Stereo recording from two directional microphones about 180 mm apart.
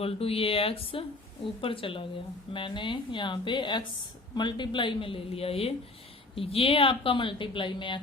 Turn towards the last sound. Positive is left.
turn(degrees=25)  # may be behind; listen again after turning